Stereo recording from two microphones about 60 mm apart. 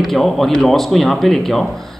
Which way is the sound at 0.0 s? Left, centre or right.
Centre.